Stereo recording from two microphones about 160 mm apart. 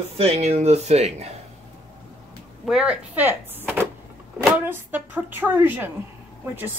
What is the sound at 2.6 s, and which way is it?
Speech, 5° right (ahead or behind).